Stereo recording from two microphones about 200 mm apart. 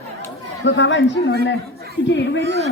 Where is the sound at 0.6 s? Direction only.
65° left (ahead or behind).